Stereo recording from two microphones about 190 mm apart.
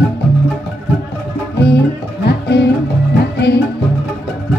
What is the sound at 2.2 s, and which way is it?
Music, 60° left (ahead or behind).